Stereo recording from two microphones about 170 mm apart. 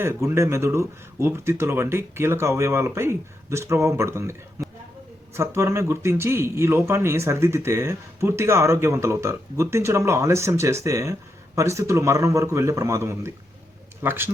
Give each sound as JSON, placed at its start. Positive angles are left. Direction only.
{"t": 0.0, "sound": "speech", "side_deg": -15}